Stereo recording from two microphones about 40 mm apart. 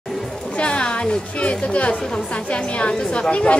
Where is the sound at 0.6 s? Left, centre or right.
Left.